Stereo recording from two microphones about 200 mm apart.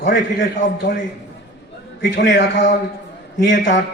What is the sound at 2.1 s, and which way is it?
Speech, 50° left (ahead or behind).